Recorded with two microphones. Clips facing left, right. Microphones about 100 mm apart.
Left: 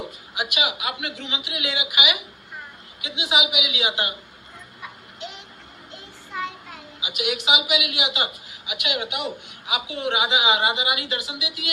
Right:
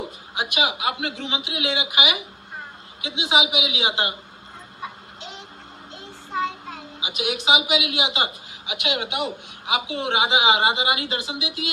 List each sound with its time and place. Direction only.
0.3 s a woman's voice: 30° right (ahead or behind)
4.8 s a sound: 30° right (ahead or behind)
6.3 s a child's voice: 30° right (ahead or behind)